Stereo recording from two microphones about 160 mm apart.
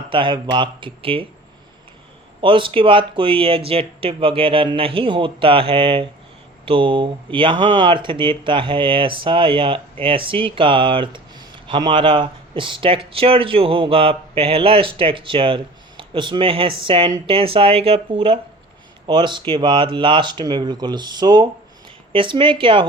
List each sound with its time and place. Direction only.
0.1 s speech: 30° right (ahead or behind)
2.4 s speech: 30° right (ahead or behind)